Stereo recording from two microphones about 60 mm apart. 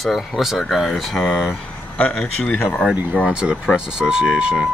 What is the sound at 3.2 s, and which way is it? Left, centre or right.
Speech, centre.